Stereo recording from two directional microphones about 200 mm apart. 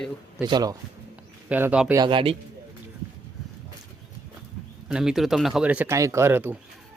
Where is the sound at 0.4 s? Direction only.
20° right (ahead or behind).